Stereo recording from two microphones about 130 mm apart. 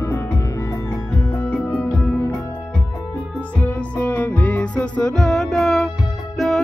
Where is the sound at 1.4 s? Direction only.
15° left (ahead or behind).